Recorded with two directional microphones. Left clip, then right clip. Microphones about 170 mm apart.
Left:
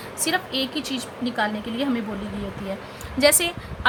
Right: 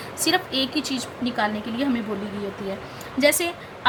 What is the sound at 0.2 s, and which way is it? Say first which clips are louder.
A woman's voice: right 2 dB; 10° left (ahead or behind).